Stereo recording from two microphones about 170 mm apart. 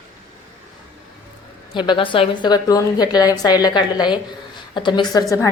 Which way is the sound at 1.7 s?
25° left (ahead or behind).